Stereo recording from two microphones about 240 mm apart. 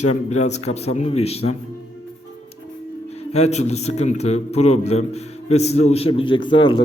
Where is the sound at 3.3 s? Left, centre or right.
Left.